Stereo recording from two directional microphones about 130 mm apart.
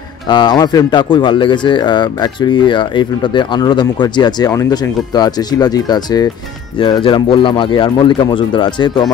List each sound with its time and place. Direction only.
0.3 s a man's voice: 35° left (ahead or behind)
6.8 s a man's voice: 40° left (ahead or behind)